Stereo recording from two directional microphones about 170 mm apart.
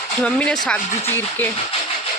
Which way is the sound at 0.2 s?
5° left (ahead or behind).